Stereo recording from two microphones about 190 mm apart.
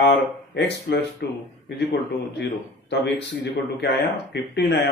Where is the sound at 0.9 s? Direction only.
65° left (ahead or behind).